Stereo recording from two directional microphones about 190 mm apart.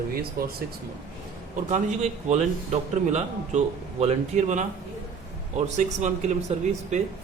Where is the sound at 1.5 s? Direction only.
40° right (ahead or behind).